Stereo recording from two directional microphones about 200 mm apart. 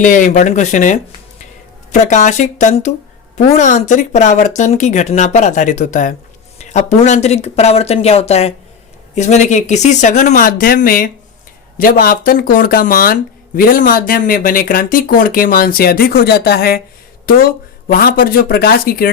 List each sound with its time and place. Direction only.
0.0 s speech: 40° left (ahead or behind)
17.8 s speech: 45° left (ahead or behind)